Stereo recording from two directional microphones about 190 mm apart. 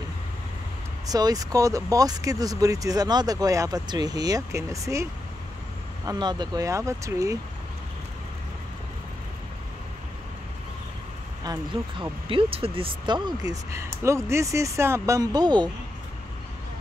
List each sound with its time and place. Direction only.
1.0 s speech: 20° right (ahead or behind)
6.0 s speech: 20° right (ahead or behind)
11.4 s speech: 25° right (ahead or behind)